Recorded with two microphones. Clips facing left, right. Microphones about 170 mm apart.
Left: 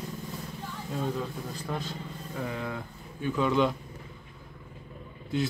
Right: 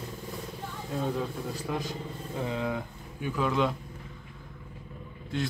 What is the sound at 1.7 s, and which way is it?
Speech, 10° right (ahead or behind).